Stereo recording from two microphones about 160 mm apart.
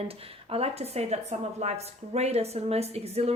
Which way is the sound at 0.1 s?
40° right (ahead or behind).